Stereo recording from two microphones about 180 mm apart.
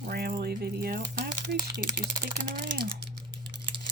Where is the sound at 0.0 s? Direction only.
60° right (ahead or behind).